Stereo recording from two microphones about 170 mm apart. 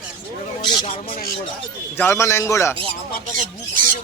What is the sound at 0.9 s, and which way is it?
Speech, 45° left (ahead or behind).